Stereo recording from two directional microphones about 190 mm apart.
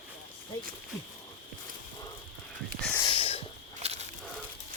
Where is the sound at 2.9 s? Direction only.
25° left (ahead or behind).